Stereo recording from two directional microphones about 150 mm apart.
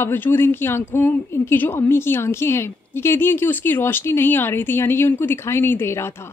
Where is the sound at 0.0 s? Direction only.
15° left (ahead or behind).